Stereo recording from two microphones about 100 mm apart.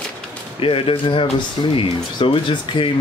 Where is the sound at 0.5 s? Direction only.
65° left (ahead or behind).